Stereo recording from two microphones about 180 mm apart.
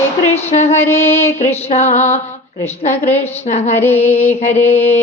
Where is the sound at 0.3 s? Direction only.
40° left (ahead or behind).